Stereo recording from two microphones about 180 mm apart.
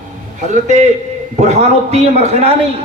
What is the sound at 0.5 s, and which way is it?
A man's voice, 40° right (ahead or behind).